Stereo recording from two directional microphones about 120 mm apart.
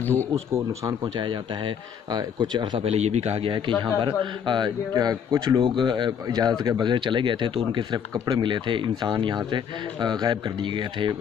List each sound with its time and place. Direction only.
0.8 s speech: 40° right (ahead or behind)
2.8 s speech: 60° right (ahead or behind); by 5.6 s 30° right (ahead or behind)
5.6 s speech: 40° right (ahead or behind)